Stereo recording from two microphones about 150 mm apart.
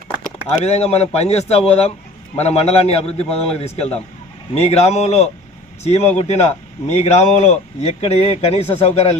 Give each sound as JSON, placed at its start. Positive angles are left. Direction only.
{"t": 0.3, "sound": "speech", "side_deg": 45}